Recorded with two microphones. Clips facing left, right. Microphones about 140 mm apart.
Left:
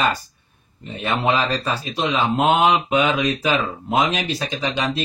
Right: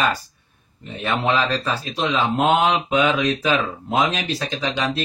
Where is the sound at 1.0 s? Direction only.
15° left (ahead or behind).